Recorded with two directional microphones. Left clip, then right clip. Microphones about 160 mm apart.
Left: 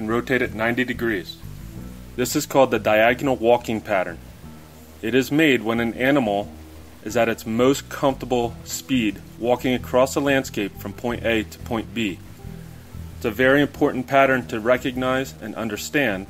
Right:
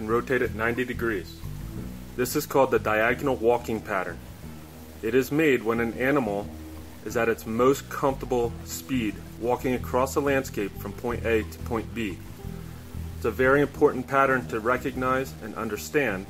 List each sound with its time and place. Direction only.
0.0 s speech: 55° left (ahead or behind)
2.1 s speech: 40° left (ahead or behind)
13.2 s speech: 50° left (ahead or behind)